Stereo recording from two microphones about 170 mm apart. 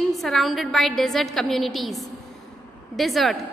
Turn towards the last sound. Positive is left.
turn(degrees=0)  # may be behind; listen again after turning